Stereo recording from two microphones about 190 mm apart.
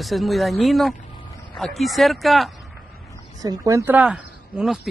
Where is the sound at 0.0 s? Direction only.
Centre (ahead or behind).